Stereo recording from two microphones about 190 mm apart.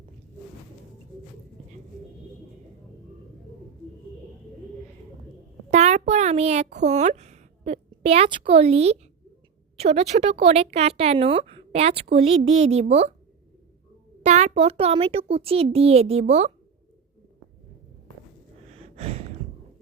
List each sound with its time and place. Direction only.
5.7 s a sound: 35° right (ahead or behind)
6.8 s a woman's voice: 35° right (ahead or behind)
14.2 s a child's voice: 35° right (ahead or behind)
18.7 s gasp: 35° right (ahead or behind)